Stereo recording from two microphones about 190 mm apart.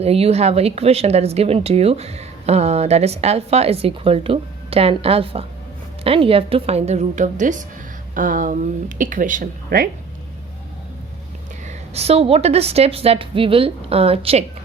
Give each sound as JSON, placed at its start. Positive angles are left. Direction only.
{"t": 0.0, "sound": "speech", "side_deg": -30}
{"t": 11.6, "sound": "speech", "side_deg": -30}